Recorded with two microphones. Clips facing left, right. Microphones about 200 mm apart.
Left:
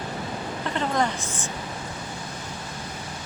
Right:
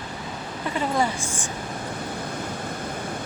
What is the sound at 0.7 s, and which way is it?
Speech, 10° right (ahead or behind).